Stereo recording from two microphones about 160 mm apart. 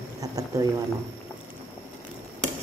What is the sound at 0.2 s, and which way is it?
Speech, 25° right (ahead or behind).